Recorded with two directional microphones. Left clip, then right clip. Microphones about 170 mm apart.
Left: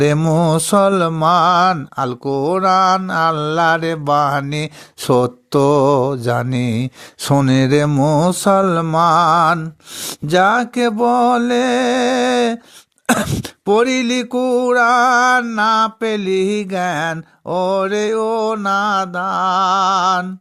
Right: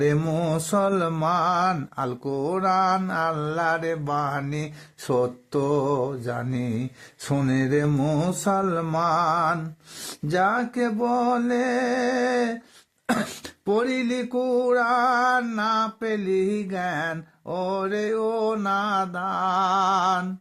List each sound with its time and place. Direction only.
0.0 s mantra: 40° left (ahead or behind)
7.9 s mantra: 35° left (ahead or behind)
8.1 s mantra: 45° left (ahead or behind)
13.7 s mantra: 40° left (ahead or behind); by 20.2 s 25° left (ahead or behind)